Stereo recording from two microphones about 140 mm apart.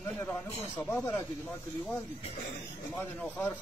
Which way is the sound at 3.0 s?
10° left (ahead or behind).